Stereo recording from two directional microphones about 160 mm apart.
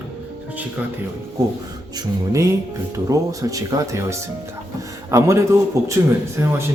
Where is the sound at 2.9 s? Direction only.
20° right (ahead or behind).